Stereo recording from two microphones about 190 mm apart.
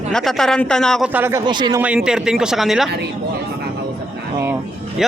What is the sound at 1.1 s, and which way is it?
Speech, 10° right (ahead or behind).